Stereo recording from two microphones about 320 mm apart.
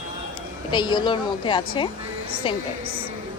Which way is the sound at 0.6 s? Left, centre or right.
Centre.